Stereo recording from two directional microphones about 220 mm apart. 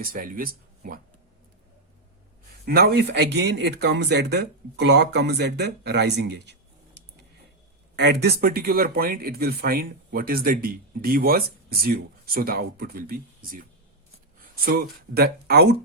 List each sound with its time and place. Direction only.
0.0 s speech: 40° right (ahead or behind)
2.6 s speech: 45° right (ahead or behind)
7.9 s speech: 50° right (ahead or behind)